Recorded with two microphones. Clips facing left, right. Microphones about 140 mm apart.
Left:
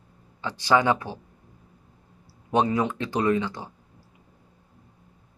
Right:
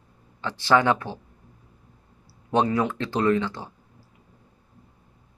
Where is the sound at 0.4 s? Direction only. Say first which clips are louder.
Right 1 dB; 15° left (ahead or behind).